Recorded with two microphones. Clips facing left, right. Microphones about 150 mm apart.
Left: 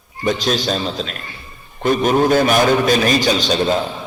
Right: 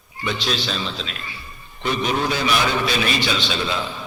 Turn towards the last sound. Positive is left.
turn(degrees=45)  # may be behind; listen again after turning